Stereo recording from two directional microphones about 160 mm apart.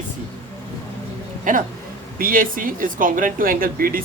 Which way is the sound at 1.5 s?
55° right (ahead or behind).